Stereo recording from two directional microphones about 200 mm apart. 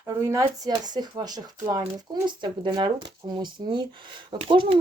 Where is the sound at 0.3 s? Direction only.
15° right (ahead or behind).